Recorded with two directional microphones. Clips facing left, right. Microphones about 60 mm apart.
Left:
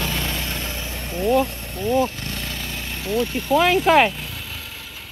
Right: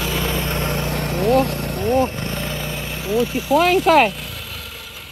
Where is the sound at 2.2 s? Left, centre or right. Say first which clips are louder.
Right 5 dB; centre.